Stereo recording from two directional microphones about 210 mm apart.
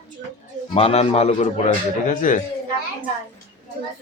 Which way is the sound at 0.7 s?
30° left (ahead or behind).